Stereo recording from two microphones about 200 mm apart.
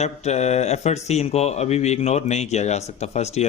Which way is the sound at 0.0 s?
35° left (ahead or behind).